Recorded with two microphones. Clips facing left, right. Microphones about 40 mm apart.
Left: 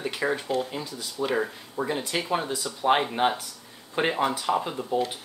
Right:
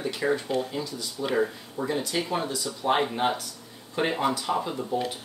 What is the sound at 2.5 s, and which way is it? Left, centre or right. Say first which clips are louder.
Speech: left 4 dB; left.